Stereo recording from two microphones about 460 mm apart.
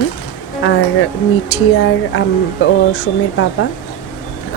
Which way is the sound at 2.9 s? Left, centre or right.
Left.